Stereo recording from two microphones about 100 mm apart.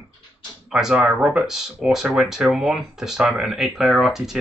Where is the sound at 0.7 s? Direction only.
5° right (ahead or behind).